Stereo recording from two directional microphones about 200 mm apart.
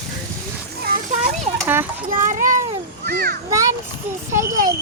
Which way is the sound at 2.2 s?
40° right (ahead or behind).